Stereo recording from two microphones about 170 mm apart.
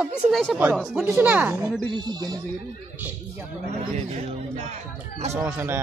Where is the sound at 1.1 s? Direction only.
10° right (ahead or behind).